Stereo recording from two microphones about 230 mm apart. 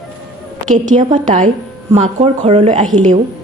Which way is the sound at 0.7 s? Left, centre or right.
Right.